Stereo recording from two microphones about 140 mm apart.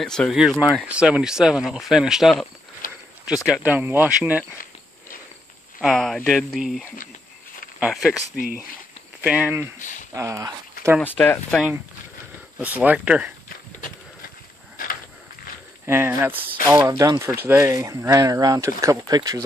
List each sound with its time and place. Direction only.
0.0 s speech: 5° left (ahead or behind)
2.8 s a sound: 80° left
3.4 s speech: 10° right (ahead or behind)
5.8 s speech: centre (ahead or behind)
9.8 s speech: 65° left (ahead or behind)
10.1 s speech: 20° right (ahead or behind)
11.0 s speech: 10° left (ahead or behind)
11.5 s speech: 10° right (ahead or behind)
13.7 s horse: 70° left (ahead or behind)
15.9 s speech: 15° right (ahead or behind)